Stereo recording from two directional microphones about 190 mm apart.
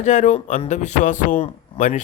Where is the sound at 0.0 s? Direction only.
40° left (ahead or behind).